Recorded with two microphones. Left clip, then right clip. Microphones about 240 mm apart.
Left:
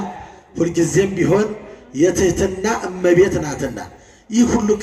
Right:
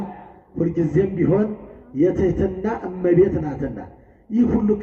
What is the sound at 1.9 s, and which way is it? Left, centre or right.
Speech, left.